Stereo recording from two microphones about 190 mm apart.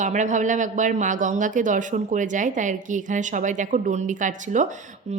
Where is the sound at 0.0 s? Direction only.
40° right (ahead or behind).